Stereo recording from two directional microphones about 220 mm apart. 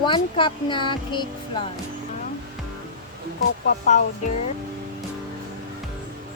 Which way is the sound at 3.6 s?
35° left (ahead or behind).